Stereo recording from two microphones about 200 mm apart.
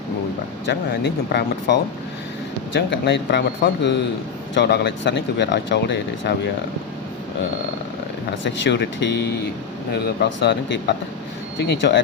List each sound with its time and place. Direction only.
0.7 s speech: 55° left (ahead or behind)
8.4 s speech: 60° left (ahead or behind)